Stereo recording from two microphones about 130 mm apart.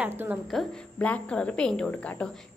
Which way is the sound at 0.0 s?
15° right (ahead or behind).